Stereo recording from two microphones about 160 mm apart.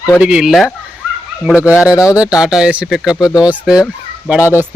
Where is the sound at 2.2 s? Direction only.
5° right (ahead or behind).